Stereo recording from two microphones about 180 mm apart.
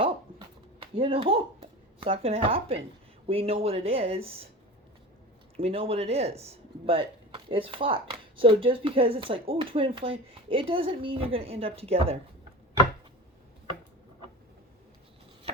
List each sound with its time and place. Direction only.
0.0 s a sound: 30° right (ahead or behind)
2.0 s speech: 30° right (ahead or behind)
5.5 s speech: 30° right (ahead or behind)